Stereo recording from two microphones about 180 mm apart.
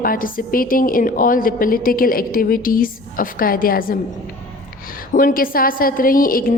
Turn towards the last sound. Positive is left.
turn(degrees=50)  # may be behind; listen again after turning